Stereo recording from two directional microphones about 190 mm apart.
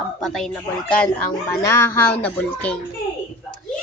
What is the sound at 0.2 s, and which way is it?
Speech, centre (ahead or behind).